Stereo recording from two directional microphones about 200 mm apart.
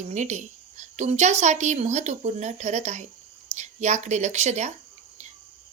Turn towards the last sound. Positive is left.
turn(degrees=-35)  # may be behind; listen again after turning